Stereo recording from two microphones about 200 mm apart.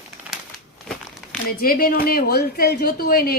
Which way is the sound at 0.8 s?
Centre (ahead or behind).